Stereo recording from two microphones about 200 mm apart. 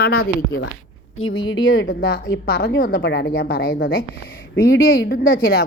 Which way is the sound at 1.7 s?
50° left (ahead or behind).